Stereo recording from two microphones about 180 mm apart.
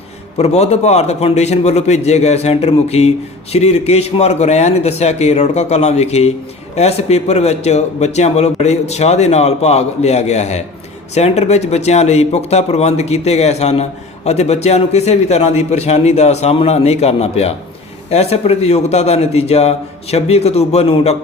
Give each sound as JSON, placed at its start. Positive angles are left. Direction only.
{"t": 0.3, "sound": "a man's voice", "side_deg": 35}